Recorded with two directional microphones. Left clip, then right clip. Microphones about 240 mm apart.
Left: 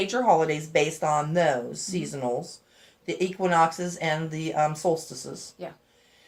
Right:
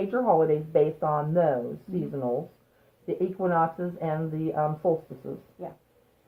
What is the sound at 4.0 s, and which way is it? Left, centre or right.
Speech, centre.